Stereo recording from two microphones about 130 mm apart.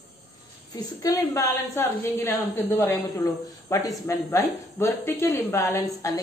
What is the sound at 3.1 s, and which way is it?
Speech, 25° left (ahead or behind).